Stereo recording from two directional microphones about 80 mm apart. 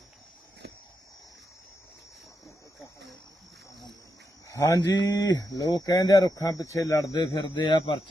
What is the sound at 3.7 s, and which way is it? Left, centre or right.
Cricket, left.